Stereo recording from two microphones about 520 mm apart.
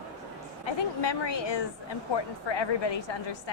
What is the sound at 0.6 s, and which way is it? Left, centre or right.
A woman's voice, left.